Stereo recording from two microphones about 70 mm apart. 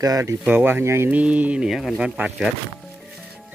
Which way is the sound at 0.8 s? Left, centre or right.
Right.